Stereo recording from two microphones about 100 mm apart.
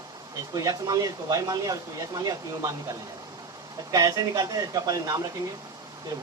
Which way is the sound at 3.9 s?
40° right (ahead or behind).